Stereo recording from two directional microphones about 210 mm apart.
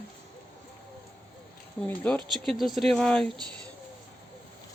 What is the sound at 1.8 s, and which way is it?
Speech, 10° left (ahead or behind).